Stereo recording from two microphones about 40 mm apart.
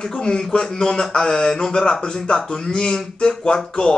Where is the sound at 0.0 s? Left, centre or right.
Centre.